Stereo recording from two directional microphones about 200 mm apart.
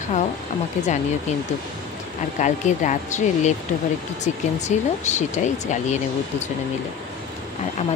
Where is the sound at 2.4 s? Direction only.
35° left (ahead or behind).